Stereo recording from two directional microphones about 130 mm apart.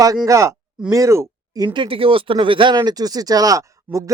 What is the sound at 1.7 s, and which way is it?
Speech, 45° right (ahead or behind).